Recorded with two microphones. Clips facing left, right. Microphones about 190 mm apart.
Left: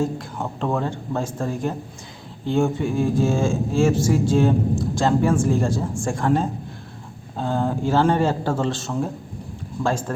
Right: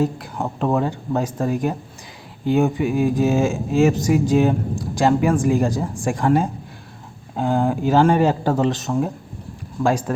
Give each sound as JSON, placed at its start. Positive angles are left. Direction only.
{"t": 0.2, "sound": "speech", "side_deg": -15}